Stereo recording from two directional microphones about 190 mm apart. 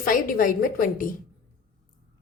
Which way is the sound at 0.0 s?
50° left (ahead or behind).